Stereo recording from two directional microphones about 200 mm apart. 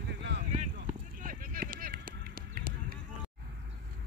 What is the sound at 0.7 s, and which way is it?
Run, 45° right (ahead or behind).